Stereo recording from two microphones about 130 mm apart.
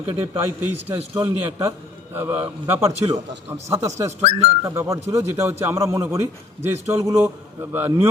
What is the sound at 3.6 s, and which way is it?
A man's voice, 25° right (ahead or behind).